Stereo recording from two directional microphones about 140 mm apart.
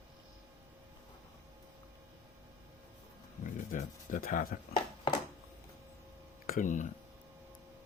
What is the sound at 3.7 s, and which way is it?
Speech, 75° left (ahead or behind).